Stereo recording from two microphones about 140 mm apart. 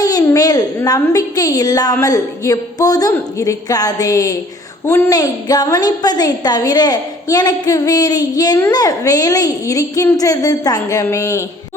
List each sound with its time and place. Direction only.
0.0 s a woman's voice: 25° left (ahead or behind)